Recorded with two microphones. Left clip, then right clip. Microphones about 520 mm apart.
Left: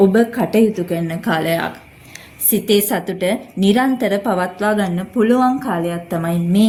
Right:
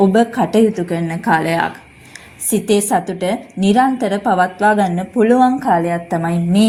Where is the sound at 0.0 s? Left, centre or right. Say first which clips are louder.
Right 1 dB; left.